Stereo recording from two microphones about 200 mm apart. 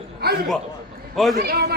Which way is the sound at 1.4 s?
50° right (ahead or behind).